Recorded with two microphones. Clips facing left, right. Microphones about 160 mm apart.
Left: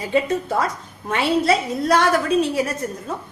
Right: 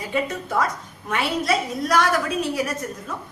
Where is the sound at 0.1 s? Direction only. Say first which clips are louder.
Left 5 dB; 30° left (ahead or behind).